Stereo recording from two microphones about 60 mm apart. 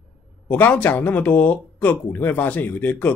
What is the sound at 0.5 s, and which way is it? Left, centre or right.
A man's voice, left.